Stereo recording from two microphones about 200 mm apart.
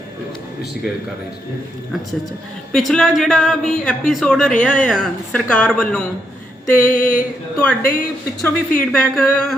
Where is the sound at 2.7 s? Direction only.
Centre (ahead or behind).